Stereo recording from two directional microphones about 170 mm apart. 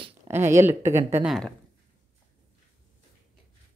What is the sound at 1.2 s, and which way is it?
Speech, 5° left (ahead or behind).